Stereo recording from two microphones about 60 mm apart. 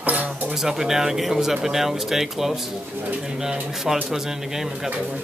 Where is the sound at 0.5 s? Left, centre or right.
Centre.